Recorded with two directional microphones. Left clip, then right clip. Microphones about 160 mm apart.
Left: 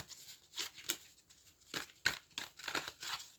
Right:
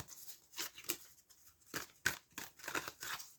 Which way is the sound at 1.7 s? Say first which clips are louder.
Left 2 dB; 20° left (ahead or behind).